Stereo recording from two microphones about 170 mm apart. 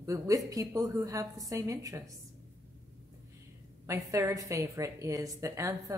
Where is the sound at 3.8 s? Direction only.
15° right (ahead or behind).